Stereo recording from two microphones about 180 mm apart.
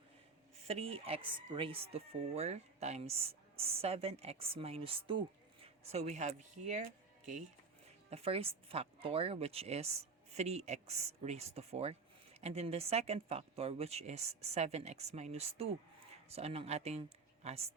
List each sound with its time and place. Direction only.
0.7 s speech: 35° right (ahead or behind)
8.1 s speech: 35° right (ahead or behind)